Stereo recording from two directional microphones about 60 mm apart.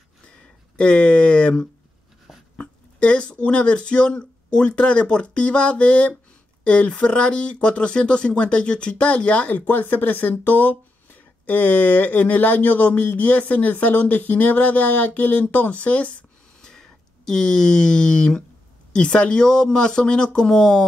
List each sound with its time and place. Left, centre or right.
0.7 s speech: centre
16.6 s speech: centre